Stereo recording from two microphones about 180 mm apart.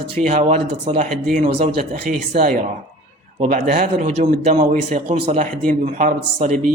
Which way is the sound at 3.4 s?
45° right (ahead or behind).